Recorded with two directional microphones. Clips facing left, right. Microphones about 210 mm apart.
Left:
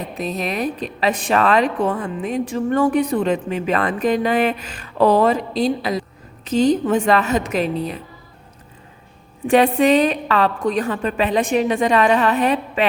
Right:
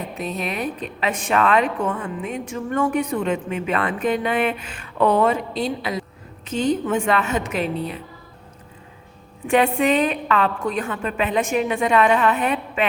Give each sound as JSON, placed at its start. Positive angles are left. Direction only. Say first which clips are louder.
{"t": 0.2, "sound": "a woman's voice", "louder": "left 4 dB", "side_deg": 40}
{"t": 9.5, "sound": "a woman's voice", "louder": "left 4 dB", "side_deg": 35}